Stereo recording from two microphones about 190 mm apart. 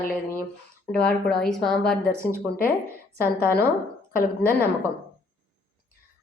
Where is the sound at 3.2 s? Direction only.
15° right (ahead or behind).